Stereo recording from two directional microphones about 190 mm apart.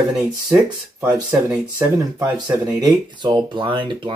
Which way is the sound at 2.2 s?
20° right (ahead or behind).